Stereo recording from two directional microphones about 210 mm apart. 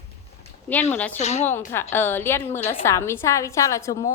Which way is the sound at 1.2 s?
30° left (ahead or behind).